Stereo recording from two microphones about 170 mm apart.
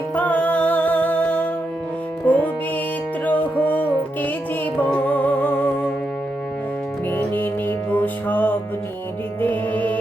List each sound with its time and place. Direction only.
0.2 s music: 10° left (ahead or behind)
7.1 s music: 10° left (ahead or behind)